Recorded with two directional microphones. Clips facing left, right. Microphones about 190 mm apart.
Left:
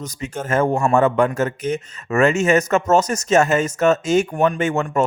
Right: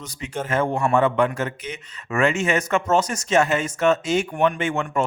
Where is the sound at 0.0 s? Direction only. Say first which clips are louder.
Left 2 dB; 40° left (ahead or behind).